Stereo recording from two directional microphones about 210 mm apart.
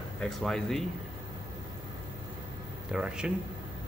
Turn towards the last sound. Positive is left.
turn(degrees=-5)  # may be behind; listen again after turning